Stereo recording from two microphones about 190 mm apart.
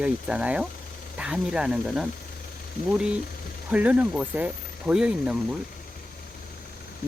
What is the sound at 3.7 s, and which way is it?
Speech, 5° right (ahead or behind).